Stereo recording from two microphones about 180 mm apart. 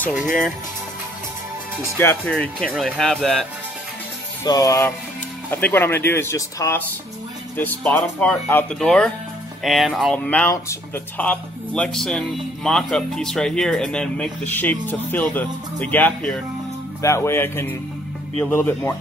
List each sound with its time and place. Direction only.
2.0 s speech: 10° left (ahead or behind)
4.5 s music: 20° left (ahead or behind)
5.5 s speech: 10° left (ahead or behind)